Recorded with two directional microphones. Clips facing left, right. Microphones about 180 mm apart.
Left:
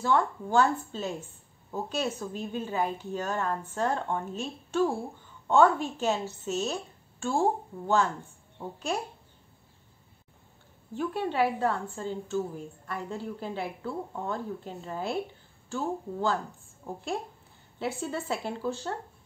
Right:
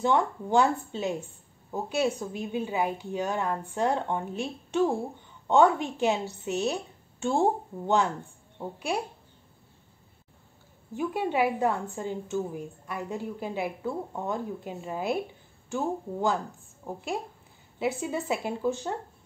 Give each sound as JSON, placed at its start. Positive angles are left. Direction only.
{"t": 0.0, "sound": "a woman's voice", "side_deg": -15}
{"t": 11.0, "sound": "a woman's voice", "side_deg": -15}